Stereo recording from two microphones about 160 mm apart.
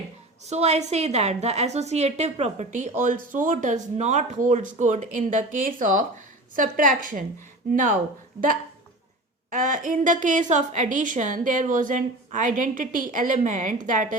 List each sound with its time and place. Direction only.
0.4 s a woman's voice: 45° right (ahead or behind)
9.5 s a woman's voice: 60° right (ahead or behind)